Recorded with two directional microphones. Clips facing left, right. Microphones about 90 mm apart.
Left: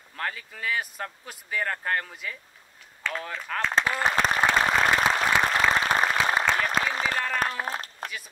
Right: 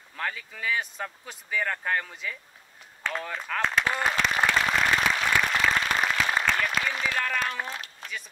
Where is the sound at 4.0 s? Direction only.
35° left (ahead or behind).